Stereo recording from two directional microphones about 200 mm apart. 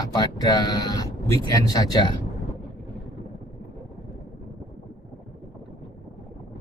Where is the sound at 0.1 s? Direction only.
20° left (ahead or behind).